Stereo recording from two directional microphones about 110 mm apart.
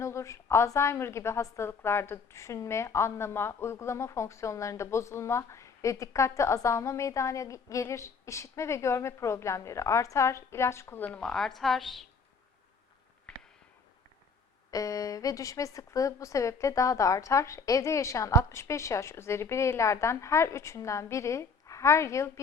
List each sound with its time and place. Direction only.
0.0 s a woman's voice: 25° left (ahead or behind); by 12.0 s centre (ahead or behind)
13.3 s a sound: 5° left (ahead or behind)
14.7 s a woman's voice: 30° left (ahead or behind)